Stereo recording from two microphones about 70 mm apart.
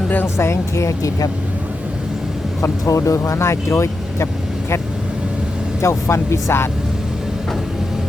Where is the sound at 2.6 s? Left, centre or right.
Left.